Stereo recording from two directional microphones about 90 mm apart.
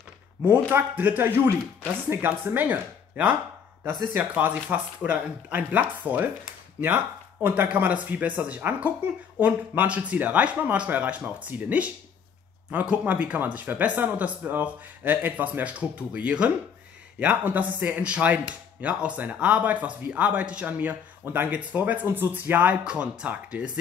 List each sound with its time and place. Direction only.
0.5 s speech: 25° right (ahead or behind)
7.4 s speech: 20° right (ahead or behind)